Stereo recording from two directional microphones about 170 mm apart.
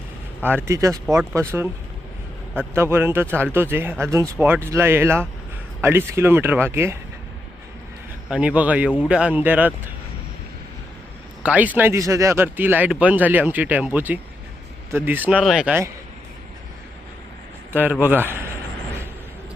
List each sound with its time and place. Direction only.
0.4 s speech: 15° right (ahead or behind)
2.7 s speech: 15° right (ahead or behind)
8.3 s speech: 5° right (ahead or behind)
11.4 s speech: 10° right (ahead or behind)
17.7 s a man's voice: 10° right (ahead or behind)